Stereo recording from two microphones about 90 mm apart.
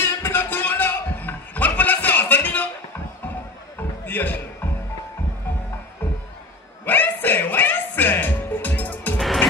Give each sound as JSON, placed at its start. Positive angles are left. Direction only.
{"t": 0.0, "sound": "a sound", "side_deg": 25}
{"t": 4.0, "sound": "basketball bounce", "side_deg": 20}
{"t": 6.9, "sound": "music", "side_deg": 20}
{"t": 9.2, "sound": "music", "side_deg": 0}